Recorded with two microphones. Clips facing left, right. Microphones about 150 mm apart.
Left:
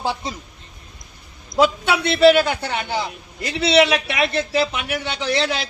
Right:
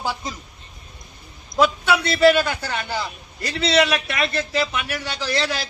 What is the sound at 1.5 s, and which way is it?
A man's voice, 25° left (ahead or behind).